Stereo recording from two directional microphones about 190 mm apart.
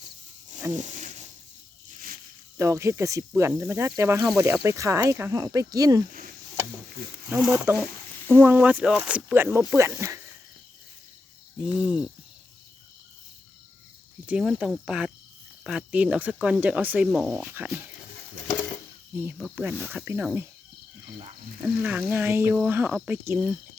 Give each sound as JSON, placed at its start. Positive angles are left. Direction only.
{"t": 0.0, "sound": "wild animals", "side_deg": -40}
{"t": 0.7, "sound": "a sound", "side_deg": -40}
{"t": 2.6, "sound": "speech", "side_deg": -15}
{"t": 6.1, "sound": "a sound", "side_deg": -50}
{"t": 7.3, "sound": "speech", "side_deg": -5}
{"t": 11.6, "sound": "speech", "side_deg": -5}
{"t": 14.3, "sound": "speech", "side_deg": -5}
{"t": 17.4, "sound": "speech", "side_deg": -10}
{"t": 19.1, "sound": "speech", "side_deg": -10}
{"t": 21.6, "sound": "speech", "side_deg": -10}